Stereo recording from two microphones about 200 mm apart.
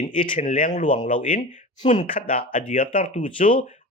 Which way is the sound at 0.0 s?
40° left (ahead or behind).